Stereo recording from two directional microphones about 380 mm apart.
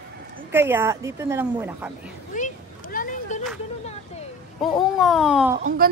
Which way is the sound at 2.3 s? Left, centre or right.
Left.